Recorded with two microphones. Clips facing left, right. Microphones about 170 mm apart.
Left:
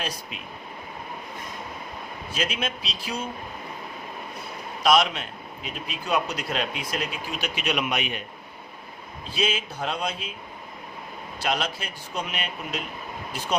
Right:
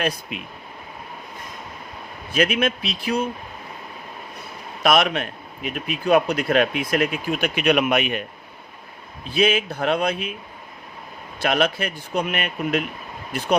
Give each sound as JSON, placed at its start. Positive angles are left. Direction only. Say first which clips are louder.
{"t": 0.0, "sound": "speech", "louder": "right 8 dB", "side_deg": -60}
{"t": 2.3, "sound": "speech", "louder": "right 9 dB", "side_deg": -60}
{"t": 4.8, "sound": "speech", "louder": "right 2 dB", "side_deg": -60}
{"t": 9.3, "sound": "speech", "louder": "right 8 dB", "side_deg": -60}
{"t": 11.4, "sound": "speech", "louder": "right 7 dB", "side_deg": -60}